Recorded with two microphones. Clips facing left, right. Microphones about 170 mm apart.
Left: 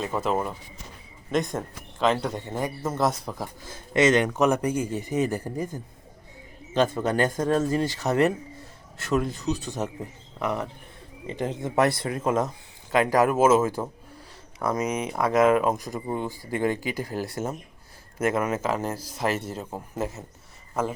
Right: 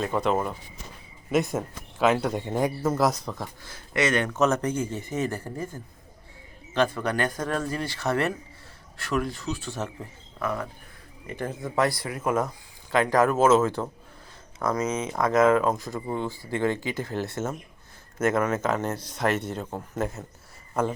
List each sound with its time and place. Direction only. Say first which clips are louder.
0.0 s speech: right 1 dB; centre (ahead or behind); by 2.7 s 15° right (ahead or behind)
2.8 s speech: right 2 dB; centre (ahead or behind)
3.7 s speech: left 5 dB; 20° left (ahead or behind); by 20.2 s 5° left (ahead or behind)